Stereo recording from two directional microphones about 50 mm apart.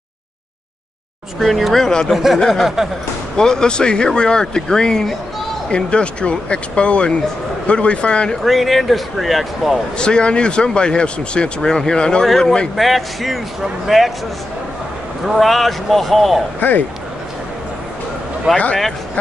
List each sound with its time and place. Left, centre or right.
1.4 s speech: centre
2.0 s speech: centre; by 8.4 s left
8.5 s speech: centre
9.9 s speech: centre
12.3 s speech: centre
15.2 s speech: centre
16.5 s speech: left
18.5 s speech: centre